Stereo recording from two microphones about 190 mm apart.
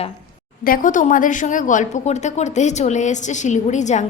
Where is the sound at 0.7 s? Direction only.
45° left (ahead or behind).